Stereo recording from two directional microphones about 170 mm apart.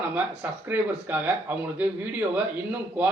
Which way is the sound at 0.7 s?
10° right (ahead or behind).